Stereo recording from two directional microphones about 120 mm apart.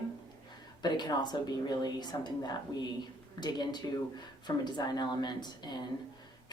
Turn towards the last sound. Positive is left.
turn(degrees=35)  # may be behind; listen again after turning